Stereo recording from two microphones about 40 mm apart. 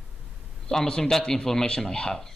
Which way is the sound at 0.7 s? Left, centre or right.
Centre.